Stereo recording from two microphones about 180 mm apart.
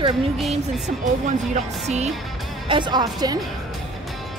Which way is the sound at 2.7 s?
25° right (ahead or behind).